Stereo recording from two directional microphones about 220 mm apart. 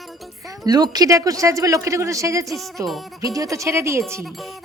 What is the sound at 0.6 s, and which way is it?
A woman's voice, 15° right (ahead or behind).